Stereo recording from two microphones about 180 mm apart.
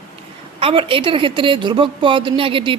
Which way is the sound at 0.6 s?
30° right (ahead or behind).